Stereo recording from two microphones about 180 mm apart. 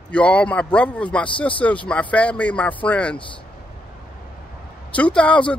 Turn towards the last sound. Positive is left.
turn(degrees=5)  # may be behind; listen again after turning